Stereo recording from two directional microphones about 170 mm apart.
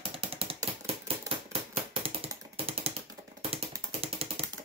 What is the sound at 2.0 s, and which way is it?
Ratchet, 35° right (ahead or behind).